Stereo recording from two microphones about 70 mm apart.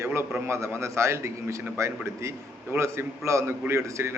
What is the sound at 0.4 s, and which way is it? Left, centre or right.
A man's voice, right.